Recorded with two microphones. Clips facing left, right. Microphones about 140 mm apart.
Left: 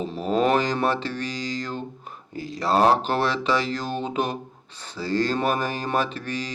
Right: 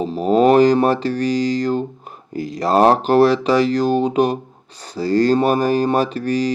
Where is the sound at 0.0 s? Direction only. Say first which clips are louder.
Right 8 dB; 40° right (ahead or behind).